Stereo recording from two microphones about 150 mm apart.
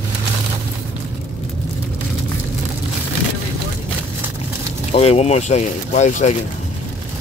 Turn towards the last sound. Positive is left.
turn(degrees=50)  # may be behind; listen again after turning